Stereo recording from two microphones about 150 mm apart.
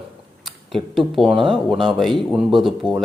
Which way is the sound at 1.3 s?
35° right (ahead or behind).